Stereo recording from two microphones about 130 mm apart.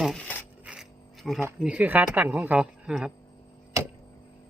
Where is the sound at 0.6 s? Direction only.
5° right (ahead or behind).